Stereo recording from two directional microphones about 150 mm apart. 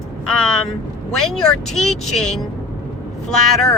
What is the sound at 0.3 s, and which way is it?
Speech, 5° left (ahead or behind).